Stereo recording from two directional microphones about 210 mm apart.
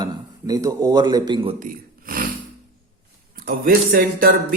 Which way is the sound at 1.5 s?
40° right (ahead or behind).